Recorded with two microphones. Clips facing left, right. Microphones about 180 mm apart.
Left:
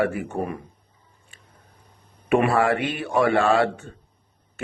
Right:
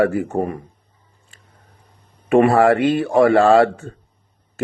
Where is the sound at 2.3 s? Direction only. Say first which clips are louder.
Right 6 dB; 40° right (ahead or behind).